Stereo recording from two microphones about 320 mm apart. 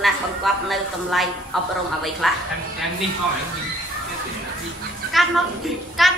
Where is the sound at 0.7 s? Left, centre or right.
Centre.